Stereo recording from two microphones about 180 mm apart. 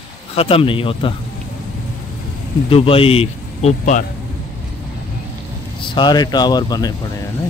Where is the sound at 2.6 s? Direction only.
30° left (ahead or behind).